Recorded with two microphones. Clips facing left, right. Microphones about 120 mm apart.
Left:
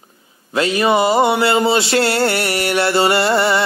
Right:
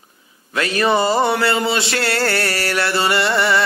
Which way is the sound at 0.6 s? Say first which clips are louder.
Left 2 dB; 20° left (ahead or behind).